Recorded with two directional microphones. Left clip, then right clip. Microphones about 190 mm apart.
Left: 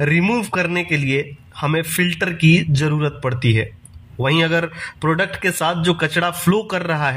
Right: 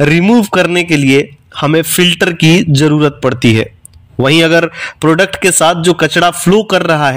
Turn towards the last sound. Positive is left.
turn(degrees=-45)  # may be behind; listen again after turning